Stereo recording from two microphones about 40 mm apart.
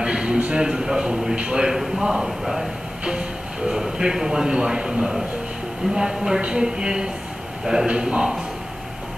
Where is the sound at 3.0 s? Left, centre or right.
Right.